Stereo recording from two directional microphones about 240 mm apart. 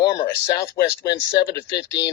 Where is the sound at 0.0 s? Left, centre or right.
Centre.